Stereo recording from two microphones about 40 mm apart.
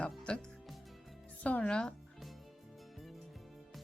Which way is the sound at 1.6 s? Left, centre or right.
Left.